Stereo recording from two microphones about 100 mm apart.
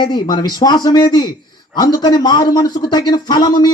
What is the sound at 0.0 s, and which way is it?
A man's voice, 45° left (ahead or behind).